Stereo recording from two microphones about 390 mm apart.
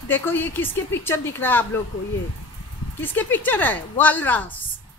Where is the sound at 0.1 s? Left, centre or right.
Centre.